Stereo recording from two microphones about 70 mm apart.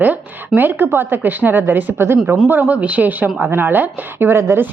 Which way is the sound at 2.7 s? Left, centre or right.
Right.